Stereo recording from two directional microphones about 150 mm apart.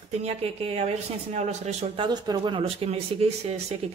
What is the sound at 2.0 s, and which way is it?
A woman's voice, 30° right (ahead or behind).